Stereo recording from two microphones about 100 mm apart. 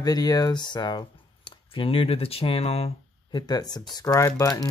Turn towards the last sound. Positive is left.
turn(degrees=35)  # may be behind; listen again after turning